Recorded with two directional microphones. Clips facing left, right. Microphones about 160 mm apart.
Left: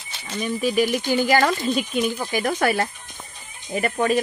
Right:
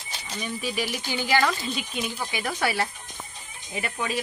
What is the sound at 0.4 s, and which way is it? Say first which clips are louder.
Speech: left 9 dB; 50° left (ahead or behind).